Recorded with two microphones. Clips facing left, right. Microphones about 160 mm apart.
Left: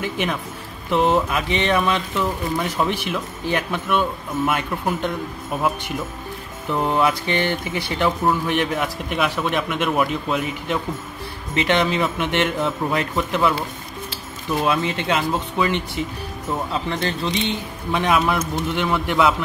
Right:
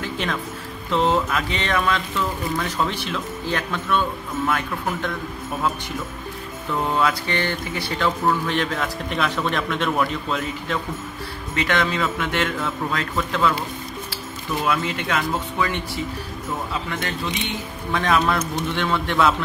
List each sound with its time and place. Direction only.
0.0 s a man's voice: 15° left (ahead or behind)
6.7 s a man's voice: 20° left (ahead or behind)
14.6 s a man's voice: 25° left (ahead or behind)
16.9 s a man's voice: 30° left (ahead or behind); by 19.3 s 15° left (ahead or behind)